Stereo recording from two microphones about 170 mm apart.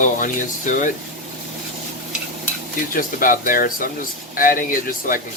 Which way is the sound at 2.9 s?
55° left (ahead or behind).